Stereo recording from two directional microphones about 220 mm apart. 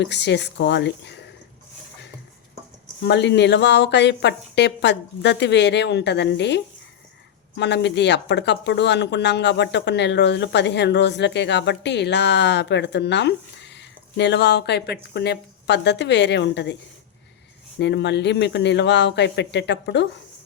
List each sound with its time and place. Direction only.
0.0 s speech: 50° left (ahead or behind)
3.0 s speech: 50° left (ahead or behind)
17.7 s speech: 50° left (ahead or behind)